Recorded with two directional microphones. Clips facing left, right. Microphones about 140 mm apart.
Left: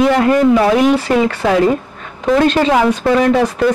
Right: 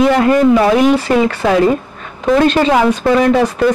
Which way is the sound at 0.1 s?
20° right (ahead or behind).